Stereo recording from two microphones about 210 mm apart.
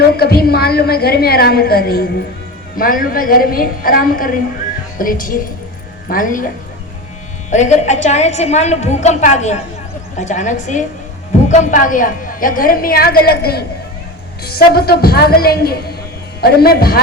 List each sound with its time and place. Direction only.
0.2 s a woman's voice: 45° left (ahead or behind)
7.5 s a woman's voice: 35° left (ahead or behind)